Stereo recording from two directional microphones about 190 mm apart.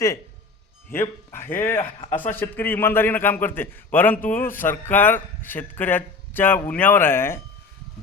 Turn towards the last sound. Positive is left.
turn(degrees=10)  # may be behind; listen again after turning